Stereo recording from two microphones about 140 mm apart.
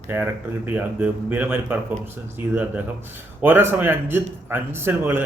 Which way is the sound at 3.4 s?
15° right (ahead or behind).